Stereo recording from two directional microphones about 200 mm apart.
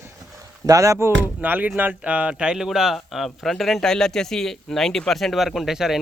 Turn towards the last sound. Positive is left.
turn(degrees=0)  # may be behind; listen again after turning